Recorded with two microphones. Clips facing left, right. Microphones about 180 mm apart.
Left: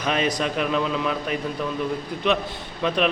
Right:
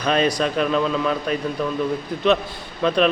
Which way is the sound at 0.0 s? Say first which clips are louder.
Right 4 dB; 20° left (ahead or behind).